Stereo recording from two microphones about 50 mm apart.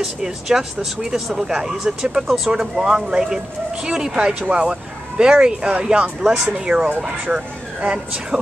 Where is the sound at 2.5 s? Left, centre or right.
Centre.